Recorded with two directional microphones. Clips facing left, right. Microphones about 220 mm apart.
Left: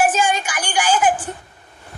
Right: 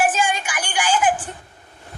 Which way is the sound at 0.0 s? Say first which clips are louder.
Left 2 dB; 40° left (ahead or behind).